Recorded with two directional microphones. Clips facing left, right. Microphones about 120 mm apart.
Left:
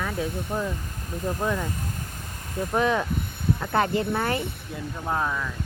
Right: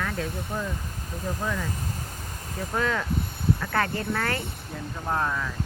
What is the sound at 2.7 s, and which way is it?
Speech, 20° left (ahead or behind).